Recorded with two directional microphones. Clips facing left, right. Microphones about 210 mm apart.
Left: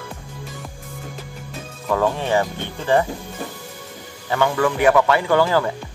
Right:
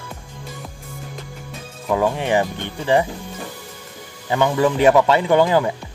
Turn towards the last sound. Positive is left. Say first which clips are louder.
# right 2 dB
turn(degrees=-15)  # may be behind; listen again after turning